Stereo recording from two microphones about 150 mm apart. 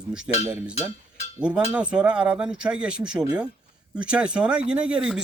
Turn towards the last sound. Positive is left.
turn(degrees=-5)  # may be behind; listen again after turning